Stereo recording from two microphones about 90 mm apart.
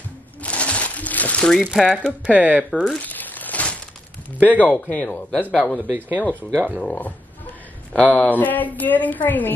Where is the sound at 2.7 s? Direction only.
5° left (ahead or behind).